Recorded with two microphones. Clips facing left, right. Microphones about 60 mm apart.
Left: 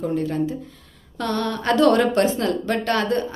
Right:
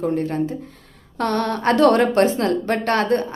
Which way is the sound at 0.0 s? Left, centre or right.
Right.